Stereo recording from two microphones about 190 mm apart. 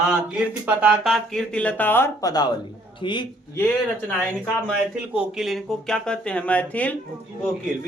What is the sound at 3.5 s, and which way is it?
Speech, 10° left (ahead or behind).